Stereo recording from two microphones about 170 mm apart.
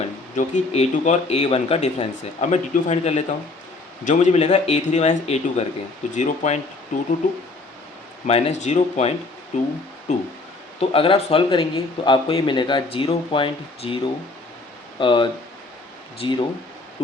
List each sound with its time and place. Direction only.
0.3 s a man's voice: 40° left (ahead or behind)
8.3 s a man's voice: 40° left (ahead or behind)
10.8 s a man's voice: 35° left (ahead or behind)